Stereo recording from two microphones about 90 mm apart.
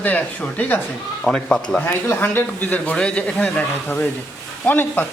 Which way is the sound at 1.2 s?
5° left (ahead or behind).